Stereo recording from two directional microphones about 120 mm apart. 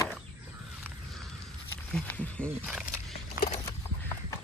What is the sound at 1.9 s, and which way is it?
Speech, 10° left (ahead or behind).